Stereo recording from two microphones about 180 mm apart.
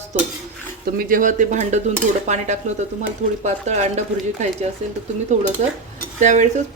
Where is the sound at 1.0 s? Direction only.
50° right (ahead or behind).